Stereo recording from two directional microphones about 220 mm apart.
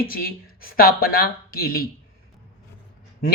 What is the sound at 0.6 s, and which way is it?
Speech, 40° left (ahead or behind).